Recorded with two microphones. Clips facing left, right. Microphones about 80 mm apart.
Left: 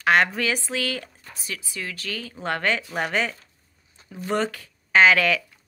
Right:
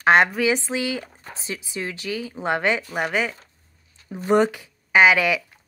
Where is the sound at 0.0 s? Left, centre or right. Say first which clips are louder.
Right 3 dB; right.